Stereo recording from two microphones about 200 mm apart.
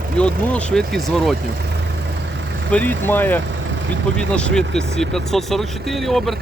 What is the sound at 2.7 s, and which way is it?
Speech, 10° left (ahead or behind).